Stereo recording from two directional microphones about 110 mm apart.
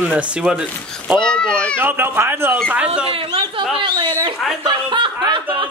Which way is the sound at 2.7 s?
10° right (ahead or behind).